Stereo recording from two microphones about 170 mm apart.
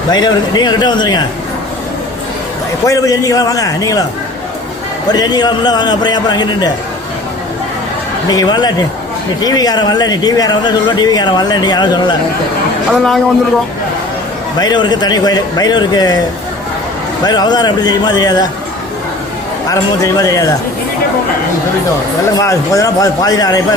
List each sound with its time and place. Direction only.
0.1 s speech: 25° left (ahead or behind)
2.8 s speech: 20° left (ahead or behind)
5.1 s speech: 25° left (ahead or behind)
8.3 s speech: 25° left (ahead or behind)
12.9 s a man's voice: centre (ahead or behind)
14.6 s speech: 25° left (ahead or behind)
17.2 s speech: 25° left (ahead or behind)
19.6 s speech: 20° left (ahead or behind)
22.4 s speech: 20° left (ahead or behind)